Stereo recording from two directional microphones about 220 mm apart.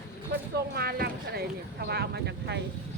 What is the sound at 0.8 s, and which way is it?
Speech, 45° right (ahead or behind).